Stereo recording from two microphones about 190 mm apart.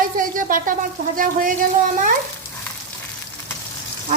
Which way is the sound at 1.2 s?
45° right (ahead or behind).